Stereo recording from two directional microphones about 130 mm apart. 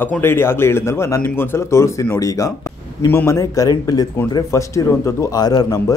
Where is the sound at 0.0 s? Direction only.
15° left (ahead or behind).